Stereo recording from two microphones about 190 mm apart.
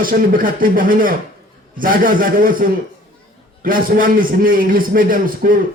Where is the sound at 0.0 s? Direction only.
45° right (ahead or behind).